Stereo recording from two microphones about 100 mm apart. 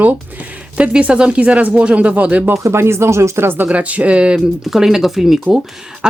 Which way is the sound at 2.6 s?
25° right (ahead or behind).